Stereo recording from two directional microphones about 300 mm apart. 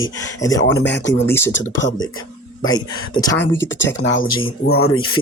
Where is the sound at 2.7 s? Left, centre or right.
Centre.